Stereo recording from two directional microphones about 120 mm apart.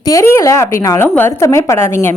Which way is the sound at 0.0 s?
25° left (ahead or behind).